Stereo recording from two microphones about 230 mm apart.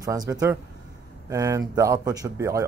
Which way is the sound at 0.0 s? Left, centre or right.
Centre.